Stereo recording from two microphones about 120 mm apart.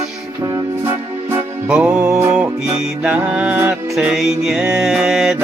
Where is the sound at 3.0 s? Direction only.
10° right (ahead or behind).